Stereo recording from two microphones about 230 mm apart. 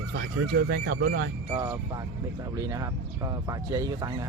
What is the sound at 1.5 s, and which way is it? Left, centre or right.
Speech, centre.